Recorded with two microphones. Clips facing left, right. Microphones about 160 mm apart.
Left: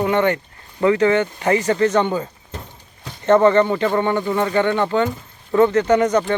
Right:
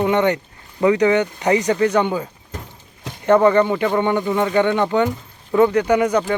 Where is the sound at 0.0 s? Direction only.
15° right (ahead or behind).